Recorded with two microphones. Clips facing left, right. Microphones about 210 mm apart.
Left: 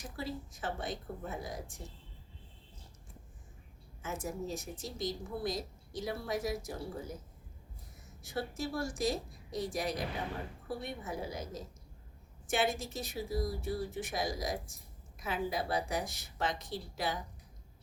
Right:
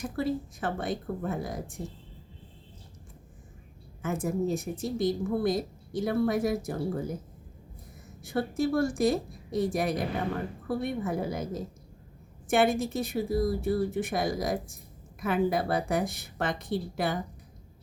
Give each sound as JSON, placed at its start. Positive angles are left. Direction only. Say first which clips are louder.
{"t": 0.0, "sound": "a woman's voice", "louder": "right 11 dB", "side_deg": -55}
{"t": 4.0, "sound": "a woman's voice", "louder": "right 10 dB", "side_deg": -55}
{"t": 8.2, "sound": "a woman's voice", "louder": "right 9 dB", "side_deg": -55}